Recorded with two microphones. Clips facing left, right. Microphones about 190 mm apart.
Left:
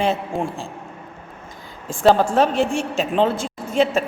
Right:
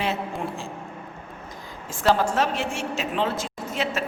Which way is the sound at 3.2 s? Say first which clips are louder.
Left 6 dB; 30° left (ahead or behind).